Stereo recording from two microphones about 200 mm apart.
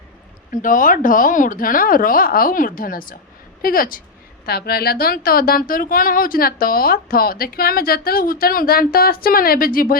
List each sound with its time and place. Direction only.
0.5 s speech: 40° left (ahead or behind)